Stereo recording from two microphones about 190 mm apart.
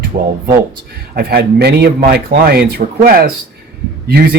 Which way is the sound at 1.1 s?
55° right (ahead or behind).